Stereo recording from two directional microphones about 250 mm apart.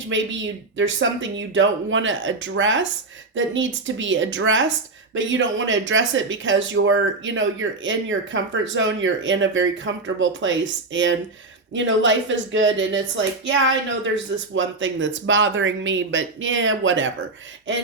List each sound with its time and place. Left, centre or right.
0.1 s speech: right